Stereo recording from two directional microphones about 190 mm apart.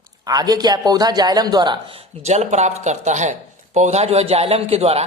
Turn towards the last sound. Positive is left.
turn(degrees=-35)  # may be behind; listen again after turning